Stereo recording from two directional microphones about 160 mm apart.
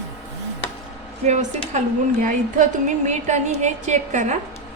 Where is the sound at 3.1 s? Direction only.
45° right (ahead or behind).